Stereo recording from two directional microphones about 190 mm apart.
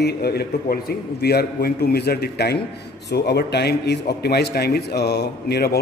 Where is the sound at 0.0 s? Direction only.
55° left (ahead or behind).